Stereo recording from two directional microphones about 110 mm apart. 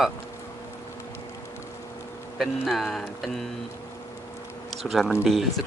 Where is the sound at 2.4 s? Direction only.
Centre (ahead or behind).